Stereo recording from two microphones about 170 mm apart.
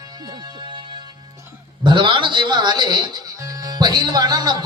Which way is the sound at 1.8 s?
30° right (ahead or behind).